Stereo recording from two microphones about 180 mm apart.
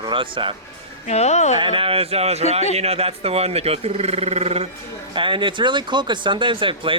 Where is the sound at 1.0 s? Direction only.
40° left (ahead or behind).